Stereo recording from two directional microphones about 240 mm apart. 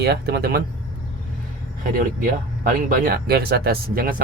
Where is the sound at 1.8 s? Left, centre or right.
Right.